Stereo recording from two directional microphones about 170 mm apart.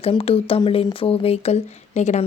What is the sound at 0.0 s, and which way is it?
Speech, 35° left (ahead or behind).